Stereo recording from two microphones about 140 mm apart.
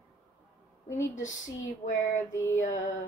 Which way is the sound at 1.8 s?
55° left (ahead or behind).